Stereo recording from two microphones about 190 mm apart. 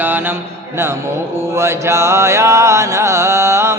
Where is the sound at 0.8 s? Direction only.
15° right (ahead or behind).